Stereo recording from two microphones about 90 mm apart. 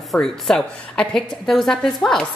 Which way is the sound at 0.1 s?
5° left (ahead or behind).